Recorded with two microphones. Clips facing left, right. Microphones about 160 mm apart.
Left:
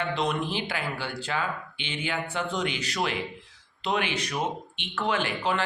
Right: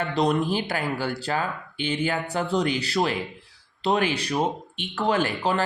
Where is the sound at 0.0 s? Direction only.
40° right (ahead or behind).